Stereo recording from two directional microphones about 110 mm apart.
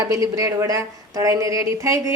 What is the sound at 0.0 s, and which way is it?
A woman's voice, 30° right (ahead or behind).